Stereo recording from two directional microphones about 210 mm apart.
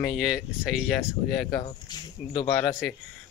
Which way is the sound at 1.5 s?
20° left (ahead or behind).